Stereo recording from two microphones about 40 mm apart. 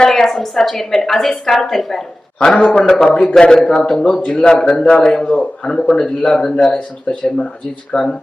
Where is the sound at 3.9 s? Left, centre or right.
Centre.